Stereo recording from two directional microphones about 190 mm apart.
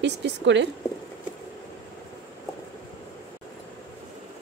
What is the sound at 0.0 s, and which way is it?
Speech, 70° right (ahead or behind).